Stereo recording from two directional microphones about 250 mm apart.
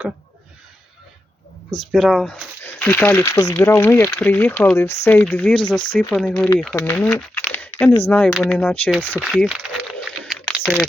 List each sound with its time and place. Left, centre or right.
1.8 s speech: centre
5.5 s speech: centre
5.9 s speech: centre
10.2 s a sound: centre